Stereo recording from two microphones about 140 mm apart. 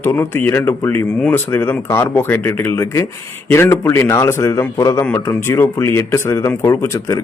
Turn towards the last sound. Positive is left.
turn(degrees=20)  # may be behind; listen again after turning